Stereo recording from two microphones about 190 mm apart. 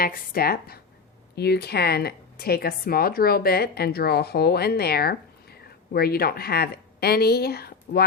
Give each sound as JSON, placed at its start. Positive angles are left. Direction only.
{"t": 0.0, "sound": "a woman's voice", "side_deg": 50}